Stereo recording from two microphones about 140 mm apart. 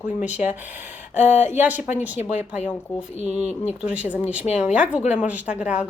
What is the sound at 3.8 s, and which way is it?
Speech, 10° right (ahead or behind).